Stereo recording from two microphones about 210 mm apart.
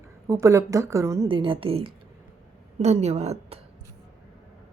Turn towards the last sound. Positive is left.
turn(degrees=-30)  # may be behind; listen again after turning